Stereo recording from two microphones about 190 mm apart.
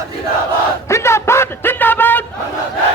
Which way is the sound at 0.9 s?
15° left (ahead or behind).